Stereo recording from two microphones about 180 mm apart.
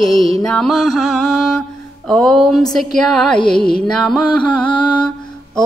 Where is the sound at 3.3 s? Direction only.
30° left (ahead or behind).